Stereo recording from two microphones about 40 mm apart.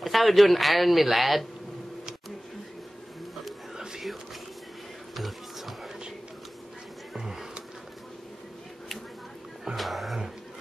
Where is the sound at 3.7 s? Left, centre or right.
Centre.